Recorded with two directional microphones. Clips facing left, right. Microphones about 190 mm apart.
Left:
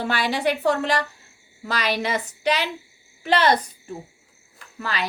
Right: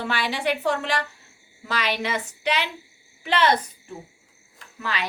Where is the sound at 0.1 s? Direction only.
40° left (ahead or behind).